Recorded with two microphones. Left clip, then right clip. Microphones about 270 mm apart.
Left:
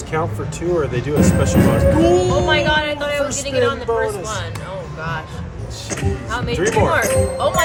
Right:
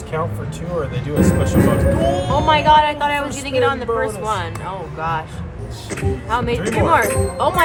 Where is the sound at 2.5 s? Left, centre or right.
Right.